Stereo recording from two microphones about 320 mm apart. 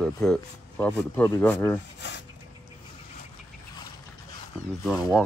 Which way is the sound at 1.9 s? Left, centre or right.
Left.